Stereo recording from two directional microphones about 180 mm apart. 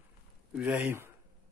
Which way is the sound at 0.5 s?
5° right (ahead or behind).